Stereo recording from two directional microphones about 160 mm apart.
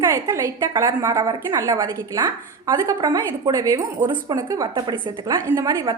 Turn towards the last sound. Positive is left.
turn(degrees=-25)  # may be behind; listen again after turning